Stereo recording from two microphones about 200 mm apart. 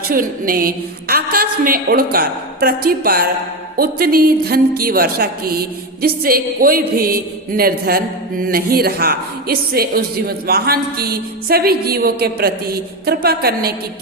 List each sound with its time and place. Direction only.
0.1 s speech: 45° right (ahead or behind)